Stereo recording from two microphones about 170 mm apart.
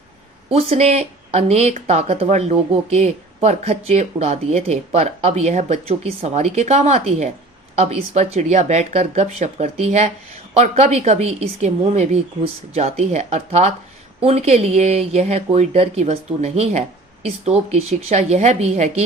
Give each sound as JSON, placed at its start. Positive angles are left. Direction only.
{"t": 0.5, "sound": "speech", "side_deg": -40}